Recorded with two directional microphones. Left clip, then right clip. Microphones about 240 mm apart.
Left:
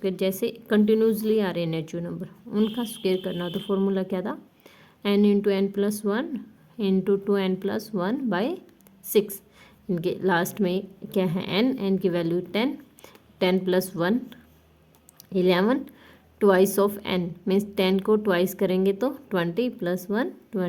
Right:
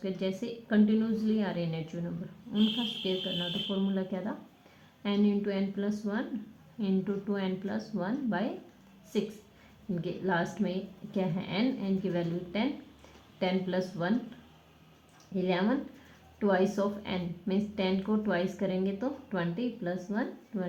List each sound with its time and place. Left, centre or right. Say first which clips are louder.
0.0 s a woman's voice: left 9 dB; left
9.9 s a woman's voice: left 8 dB; left
15.4 s a woman's voice: left 9 dB; left